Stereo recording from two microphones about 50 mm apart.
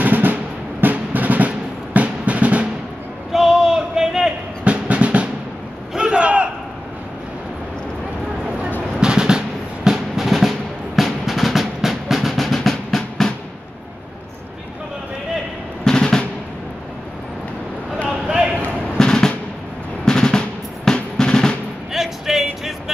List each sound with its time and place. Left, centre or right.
0.0 s drum: right
2.0 s music: right
3.3 s a sound: centre
4.6 s music: right
5.9 s battle cry: centre
8.9 s drum: centre
9.8 s music: centre
15.8 s drum: centre
18.2 s a sound: centre
18.9 s music: centre
21.9 s a sound: centre